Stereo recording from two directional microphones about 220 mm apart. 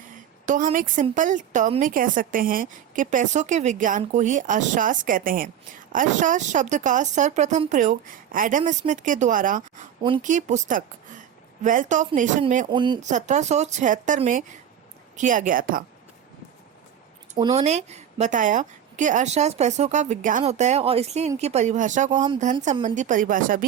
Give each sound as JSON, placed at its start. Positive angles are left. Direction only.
{"t": 0.4, "sound": "a woman's voice", "side_deg": -35}
{"t": 12.7, "sound": "speech", "side_deg": -20}
{"t": 13.1, "sound": "a woman's voice", "side_deg": -35}
{"t": 17.3, "sound": "a woman's voice", "side_deg": -25}